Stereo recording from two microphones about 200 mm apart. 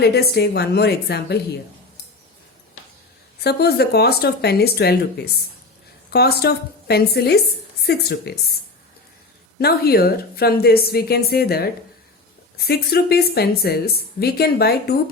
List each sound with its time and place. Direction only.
0.0 s a woman's voice: 55° left (ahead or behind)
3.4 s a woman's voice: 55° left (ahead or behind)
9.6 s a woman's voice: 50° left (ahead or behind)